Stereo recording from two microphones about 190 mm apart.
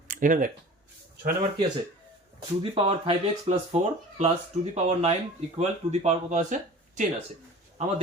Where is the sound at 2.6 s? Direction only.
30° right (ahead or behind).